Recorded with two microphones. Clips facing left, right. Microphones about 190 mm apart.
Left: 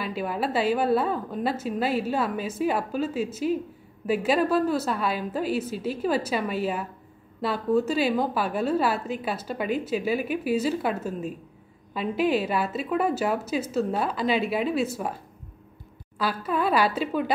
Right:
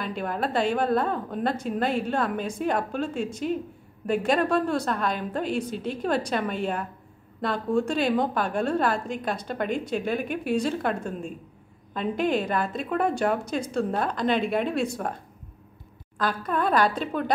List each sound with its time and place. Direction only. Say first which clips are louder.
0.0 s a woman's voice: left 1 dB; 5° left (ahead or behind)
16.2 s a woman's voice: even; 5° left (ahead or behind)